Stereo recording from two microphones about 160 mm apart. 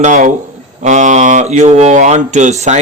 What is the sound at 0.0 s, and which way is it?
A man's voice, 50° right (ahead or behind).